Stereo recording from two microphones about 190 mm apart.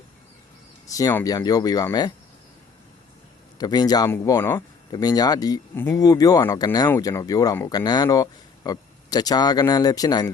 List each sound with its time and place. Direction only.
0.9 s speech: 20° left (ahead or behind)
3.6 s speech: 20° left (ahead or behind)